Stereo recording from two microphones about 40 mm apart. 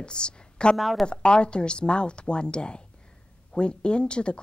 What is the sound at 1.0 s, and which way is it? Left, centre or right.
Speech, left.